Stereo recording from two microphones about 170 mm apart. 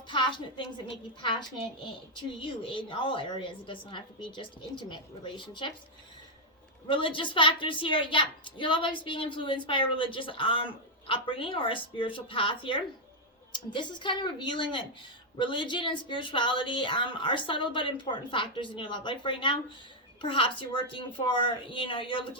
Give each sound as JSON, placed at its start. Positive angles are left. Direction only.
{"t": 0.1, "sound": "a woman's voice", "side_deg": 30}
{"t": 6.8, "sound": "a woman's voice", "side_deg": 30}